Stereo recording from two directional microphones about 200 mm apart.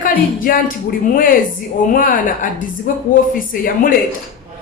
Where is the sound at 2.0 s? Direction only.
40° left (ahead or behind).